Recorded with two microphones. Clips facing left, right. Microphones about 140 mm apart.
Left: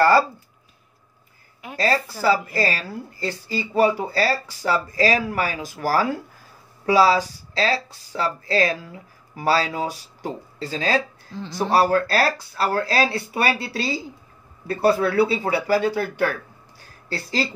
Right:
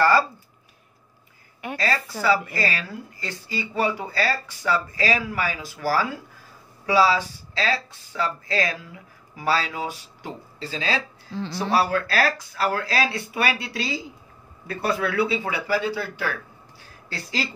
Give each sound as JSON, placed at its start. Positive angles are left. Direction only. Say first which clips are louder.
{"t": 1.8, "sound": "a woman's voice", "louder": "left 4 dB", "side_deg": 35}
{"t": 17.1, "sound": "a woman's voice", "louder": "left 4 dB", "side_deg": 35}